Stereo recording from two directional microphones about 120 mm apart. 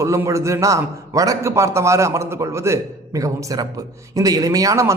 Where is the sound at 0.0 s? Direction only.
25° right (ahead or behind).